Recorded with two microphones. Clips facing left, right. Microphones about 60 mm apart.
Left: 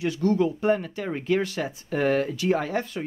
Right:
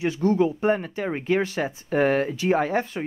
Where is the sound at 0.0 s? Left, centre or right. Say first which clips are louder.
Right 2 dB; right.